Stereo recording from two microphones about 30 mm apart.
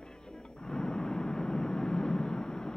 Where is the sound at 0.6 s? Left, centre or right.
Left.